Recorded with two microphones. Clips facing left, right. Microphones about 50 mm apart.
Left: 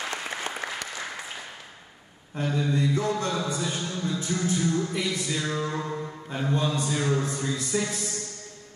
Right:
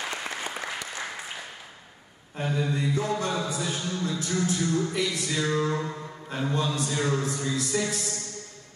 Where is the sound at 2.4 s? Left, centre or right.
Centre.